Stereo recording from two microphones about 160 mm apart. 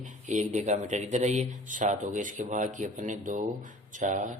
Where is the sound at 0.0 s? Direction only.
50° right (ahead or behind).